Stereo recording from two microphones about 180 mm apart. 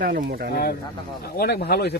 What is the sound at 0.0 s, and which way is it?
Speech, 55° right (ahead or behind).